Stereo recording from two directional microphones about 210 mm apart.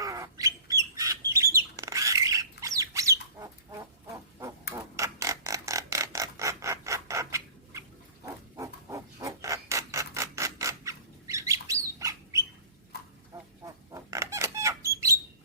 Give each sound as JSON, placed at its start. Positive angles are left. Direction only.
{"t": 0.0, "sound": "bird", "side_deg": -15}
{"t": 1.3, "sound": "squawk", "side_deg": -15}
{"t": 4.7, "sound": "a sound", "side_deg": -15}
{"t": 13.9, "sound": "bird", "side_deg": -15}